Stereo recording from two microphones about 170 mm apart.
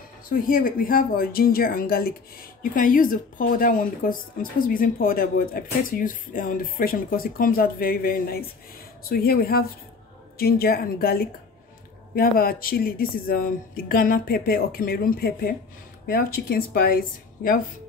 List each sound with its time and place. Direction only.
0.3 s speech: 55° left (ahead or behind)